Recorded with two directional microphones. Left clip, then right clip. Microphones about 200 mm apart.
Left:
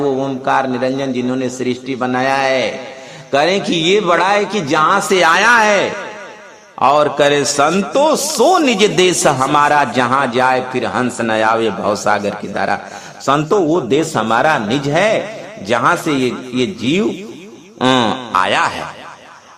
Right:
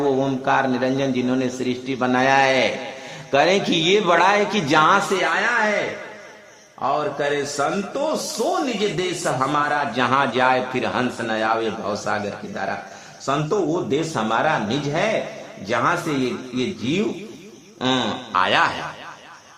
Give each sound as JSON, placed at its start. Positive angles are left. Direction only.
{"t": 0.2, "sound": "a man's voice", "side_deg": 15}
{"t": 5.2, "sound": "a man's voice", "side_deg": 45}